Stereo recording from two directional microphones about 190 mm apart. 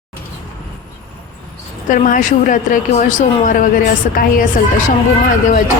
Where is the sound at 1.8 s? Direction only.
40° left (ahead or behind).